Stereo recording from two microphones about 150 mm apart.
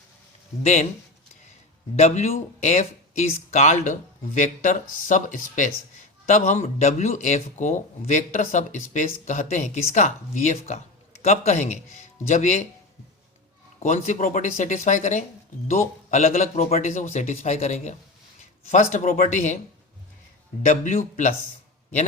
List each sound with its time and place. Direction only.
0.6 s speech: 50° left (ahead or behind)
2.0 s speech: 45° left (ahead or behind)
13.7 s speech: 55° left (ahead or behind)
20.6 s speech: 55° left (ahead or behind)